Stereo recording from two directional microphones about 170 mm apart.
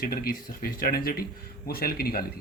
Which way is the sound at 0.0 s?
60° left (ahead or behind).